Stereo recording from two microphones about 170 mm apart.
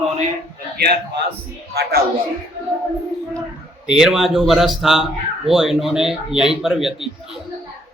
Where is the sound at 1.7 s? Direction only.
70° right (ahead or behind).